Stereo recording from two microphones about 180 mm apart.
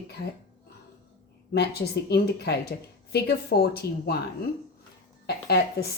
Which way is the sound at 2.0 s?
65° left (ahead or behind).